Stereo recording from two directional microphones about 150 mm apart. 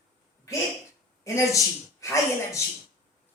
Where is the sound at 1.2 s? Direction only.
20° left (ahead or behind).